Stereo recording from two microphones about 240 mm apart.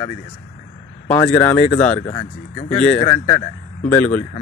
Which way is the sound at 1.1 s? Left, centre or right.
Centre.